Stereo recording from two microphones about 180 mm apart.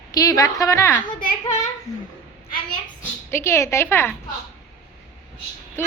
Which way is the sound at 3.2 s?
15° left (ahead or behind).